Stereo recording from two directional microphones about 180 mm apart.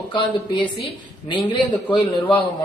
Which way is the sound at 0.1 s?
25° left (ahead or behind).